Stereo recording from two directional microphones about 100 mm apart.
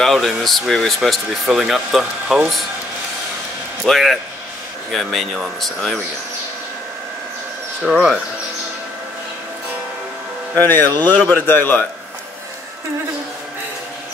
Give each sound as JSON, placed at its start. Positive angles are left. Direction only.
{"t": 0.0, "sound": "speech", "side_deg": 0}
{"t": 3.8, "sound": "speech", "side_deg": 0}
{"t": 7.8, "sound": "speech", "side_deg": -5}
{"t": 10.5, "sound": "a man's voice", "side_deg": 20}